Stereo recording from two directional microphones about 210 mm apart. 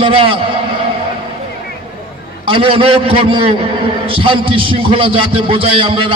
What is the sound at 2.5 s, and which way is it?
A man's voice, 25° right (ahead or behind).